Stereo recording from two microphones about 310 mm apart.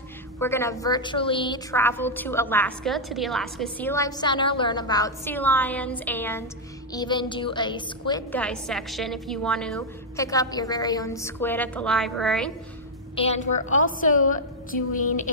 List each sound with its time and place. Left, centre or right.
0.4 s a woman's voice: centre
13.1 s a woman's voice: centre